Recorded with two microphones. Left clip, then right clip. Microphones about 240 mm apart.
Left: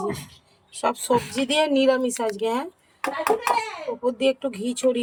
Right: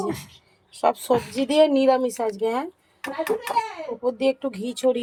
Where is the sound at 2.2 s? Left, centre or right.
Centre.